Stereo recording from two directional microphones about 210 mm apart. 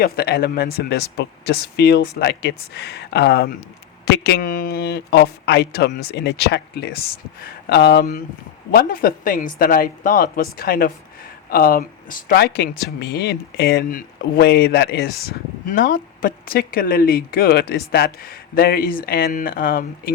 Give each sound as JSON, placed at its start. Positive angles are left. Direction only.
{"t": 0.0, "sound": "speech", "side_deg": 45}
{"t": 4.8, "sound": "speech", "side_deg": 50}